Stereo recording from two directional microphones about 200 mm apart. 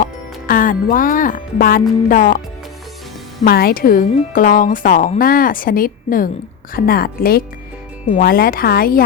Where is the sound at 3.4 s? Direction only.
50° left (ahead or behind).